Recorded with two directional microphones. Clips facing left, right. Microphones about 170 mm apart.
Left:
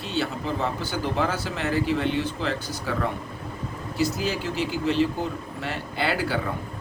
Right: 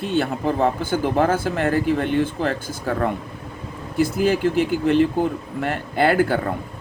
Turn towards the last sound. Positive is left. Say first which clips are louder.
# right 8 dB
turn(degrees=-50)  # may be behind; listen again after turning